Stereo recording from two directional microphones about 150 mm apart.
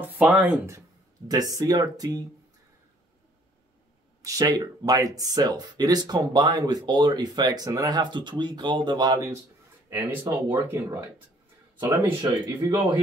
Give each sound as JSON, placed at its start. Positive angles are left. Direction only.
{"t": 0.0, "sound": "speech", "side_deg": -10}
{"t": 0.7, "sound": "speech", "side_deg": -25}
{"t": 4.2, "sound": "speech", "side_deg": -25}
{"t": 12.4, "sound": "speech", "side_deg": -20}